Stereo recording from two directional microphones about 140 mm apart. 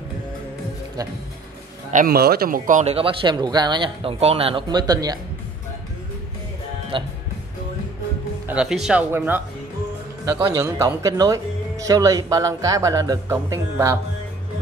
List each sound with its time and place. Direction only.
1.9 s speech: 75° right (ahead or behind); by 4.6 s 40° right (ahead or behind)
4.6 s speech: 30° right (ahead or behind)
6.9 s speech: 35° right (ahead or behind)
8.5 s speech: 5° right (ahead or behind)
9.1 s speech: 15° right (ahead or behind)
10.4 s speech: 25° right (ahead or behind)